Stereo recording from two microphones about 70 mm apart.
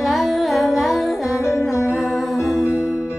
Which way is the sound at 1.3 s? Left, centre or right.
Left.